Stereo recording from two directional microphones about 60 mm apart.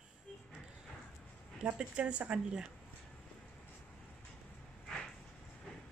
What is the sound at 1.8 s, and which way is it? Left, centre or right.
Speech, centre.